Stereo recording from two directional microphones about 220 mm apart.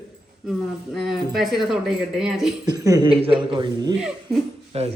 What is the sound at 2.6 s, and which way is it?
A man's voice, 15° right (ahead or behind).